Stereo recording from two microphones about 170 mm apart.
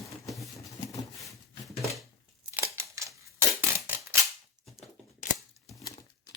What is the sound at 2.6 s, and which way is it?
Scissors, 15° right (ahead or behind).